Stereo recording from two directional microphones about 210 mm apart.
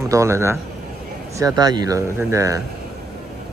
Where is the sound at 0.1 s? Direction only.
15° right (ahead or behind).